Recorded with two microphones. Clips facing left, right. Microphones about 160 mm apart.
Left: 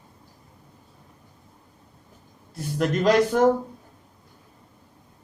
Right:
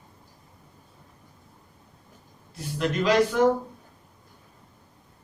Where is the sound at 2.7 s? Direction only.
45° left (ahead or behind).